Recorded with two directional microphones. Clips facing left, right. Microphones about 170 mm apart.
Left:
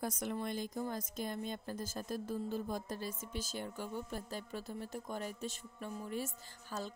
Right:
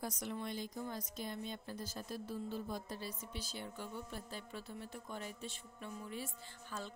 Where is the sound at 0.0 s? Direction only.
50° left (ahead or behind).